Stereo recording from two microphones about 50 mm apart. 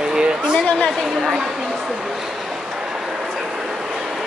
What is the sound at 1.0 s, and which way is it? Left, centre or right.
Speech, centre.